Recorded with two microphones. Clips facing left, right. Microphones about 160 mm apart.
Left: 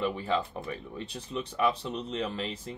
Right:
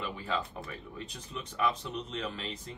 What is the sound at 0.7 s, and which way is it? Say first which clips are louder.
Speech: left 5 dB; 30° left (ahead or behind).